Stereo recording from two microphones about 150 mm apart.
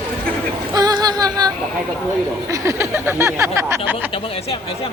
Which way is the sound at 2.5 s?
20° right (ahead or behind).